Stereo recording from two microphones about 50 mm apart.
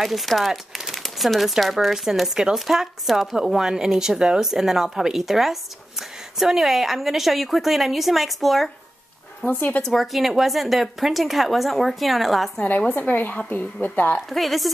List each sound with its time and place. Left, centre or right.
0.0 s a woman's voice: centre
9.5 s a woman's voice: left
9.9 s a woman's voice: centre
12.6 s a woman's voice: left
14.3 s a woman's voice: centre